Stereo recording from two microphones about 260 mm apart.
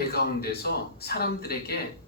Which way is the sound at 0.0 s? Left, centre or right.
Left.